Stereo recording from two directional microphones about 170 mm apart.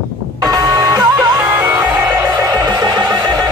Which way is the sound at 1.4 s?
10° right (ahead or behind).